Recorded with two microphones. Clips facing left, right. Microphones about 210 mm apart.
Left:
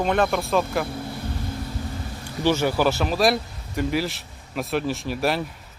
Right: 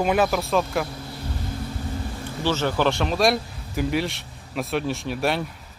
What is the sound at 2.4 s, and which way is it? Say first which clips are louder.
Speech: left 2 dB; 15° left (ahead or behind).